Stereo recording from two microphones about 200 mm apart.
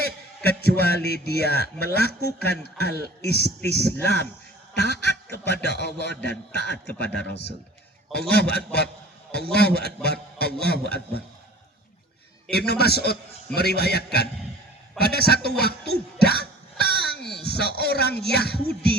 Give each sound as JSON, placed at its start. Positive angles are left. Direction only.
{"t": 0.0, "sound": "a sound", "side_deg": 55}
{"t": 0.9, "sound": "a man's voice", "side_deg": 55}
{"t": 3.7, "sound": "speech", "side_deg": -55}
{"t": 4.7, "sound": "a man's voice", "side_deg": 55}
{"t": 12.5, "sound": "a man's voice", "side_deg": 55}
{"t": 15.9, "sound": "a sound", "side_deg": 55}
{"t": 17.4, "sound": "a man's voice", "side_deg": 55}